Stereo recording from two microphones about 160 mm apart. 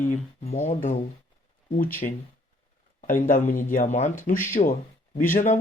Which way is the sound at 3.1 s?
55° left (ahead or behind).